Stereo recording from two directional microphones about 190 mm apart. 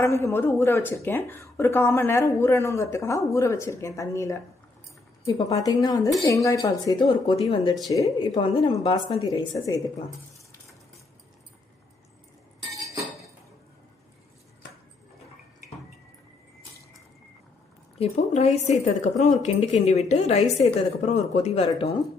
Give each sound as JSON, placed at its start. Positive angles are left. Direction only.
{"t": 0.0, "sound": "speech", "side_deg": 15}
{"t": 18.0, "sound": "a woman's voice", "side_deg": 35}
{"t": 21.6, "sound": "speech", "side_deg": 20}